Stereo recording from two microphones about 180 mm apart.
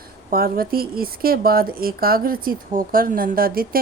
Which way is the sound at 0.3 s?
55° right (ahead or behind).